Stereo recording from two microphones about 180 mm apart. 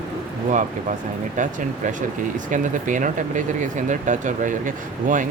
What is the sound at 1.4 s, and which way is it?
Speech, 45° right (ahead or behind).